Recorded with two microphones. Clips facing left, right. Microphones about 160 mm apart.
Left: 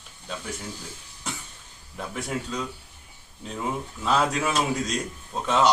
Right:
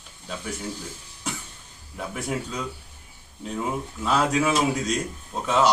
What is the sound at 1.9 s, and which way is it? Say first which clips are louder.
Speech: right 2 dB; centre (ahead or behind).